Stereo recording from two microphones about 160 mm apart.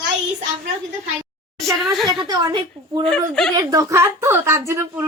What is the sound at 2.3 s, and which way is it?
Speech, 25° right (ahead or behind).